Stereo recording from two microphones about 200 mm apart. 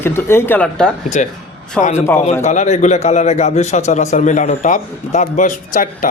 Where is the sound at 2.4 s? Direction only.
35° left (ahead or behind).